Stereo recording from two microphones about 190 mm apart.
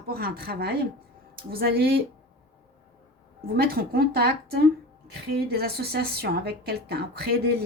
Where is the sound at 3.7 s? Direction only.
50° right (ahead or behind).